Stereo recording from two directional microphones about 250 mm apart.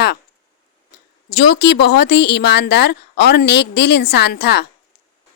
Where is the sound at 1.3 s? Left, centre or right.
Left.